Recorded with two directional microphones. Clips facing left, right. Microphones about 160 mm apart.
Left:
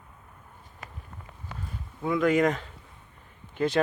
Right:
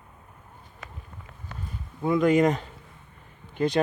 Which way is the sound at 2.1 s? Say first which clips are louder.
Right 3 dB; 35° right (ahead or behind).